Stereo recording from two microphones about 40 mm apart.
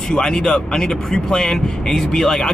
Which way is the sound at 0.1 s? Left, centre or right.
Centre.